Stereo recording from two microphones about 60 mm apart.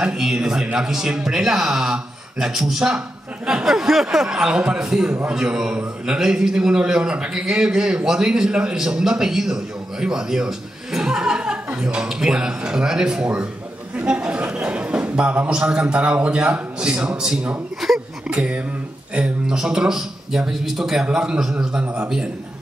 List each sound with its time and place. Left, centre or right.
0.0 s a man's voice: centre
17.7 s speech: centre
18.3 s a man's voice: centre
21.8 s a man's voice: right